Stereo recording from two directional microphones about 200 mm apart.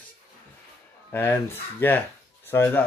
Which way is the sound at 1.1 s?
10° left (ahead or behind).